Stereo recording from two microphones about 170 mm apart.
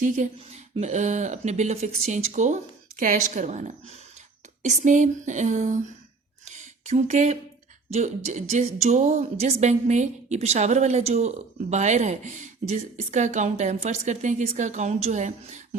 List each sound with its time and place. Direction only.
0.0 s speech: 45° right (ahead or behind)
6.4 s a sound: 45° right (ahead or behind)
7.9 s speech: 40° right (ahead or behind)